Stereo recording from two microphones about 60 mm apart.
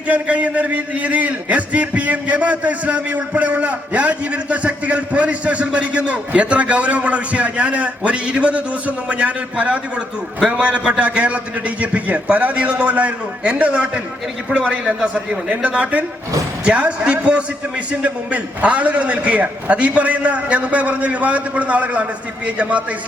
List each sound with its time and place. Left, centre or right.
0.1 s a man's voice: right